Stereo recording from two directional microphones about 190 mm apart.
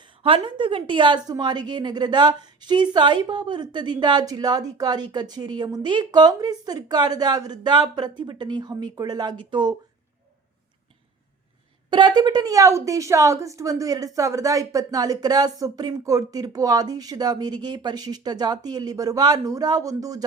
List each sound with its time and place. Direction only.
0.2 s a woman's voice: 30° right (ahead or behind)
11.9 s a woman's voice: 25° right (ahead or behind)